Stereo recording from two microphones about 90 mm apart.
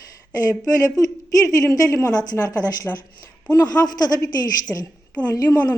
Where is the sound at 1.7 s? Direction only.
40° left (ahead or behind).